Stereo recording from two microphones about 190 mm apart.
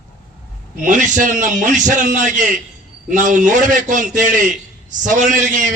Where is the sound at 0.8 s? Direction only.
40° right (ahead or behind).